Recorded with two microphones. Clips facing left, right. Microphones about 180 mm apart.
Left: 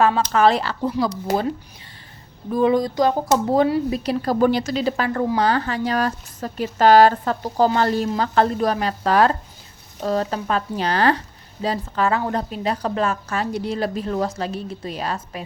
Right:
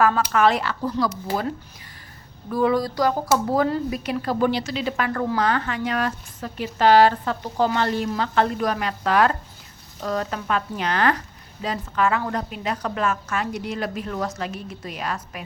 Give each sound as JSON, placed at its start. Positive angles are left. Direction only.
{"t": 0.3, "sound": "a woman's voice", "side_deg": 30}
{"t": 0.8, "sound": "speech", "side_deg": 20}
{"t": 2.5, "sound": "a woman's voice", "side_deg": 20}